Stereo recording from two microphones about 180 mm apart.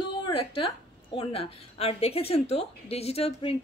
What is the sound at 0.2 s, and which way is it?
A woman's voice, 30° left (ahead or behind).